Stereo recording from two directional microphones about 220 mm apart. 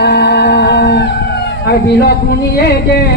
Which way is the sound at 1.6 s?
45° left (ahead or behind).